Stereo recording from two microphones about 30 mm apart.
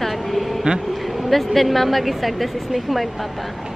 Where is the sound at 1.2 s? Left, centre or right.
Centre.